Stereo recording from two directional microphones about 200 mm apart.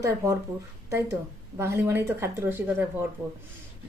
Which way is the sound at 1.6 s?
10° right (ahead or behind).